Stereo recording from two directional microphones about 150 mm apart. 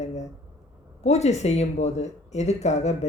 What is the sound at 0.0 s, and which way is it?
Speech, 50° left (ahead or behind).